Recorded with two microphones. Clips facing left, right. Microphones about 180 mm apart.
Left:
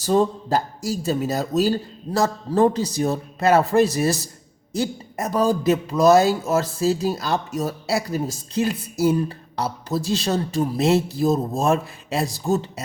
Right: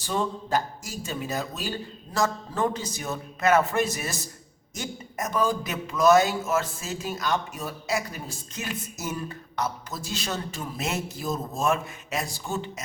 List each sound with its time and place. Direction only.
0.0 s speech: 35° left (ahead or behind)